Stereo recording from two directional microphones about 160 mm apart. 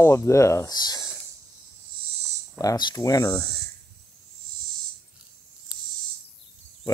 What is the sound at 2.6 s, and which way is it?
Speech, 25° left (ahead or behind).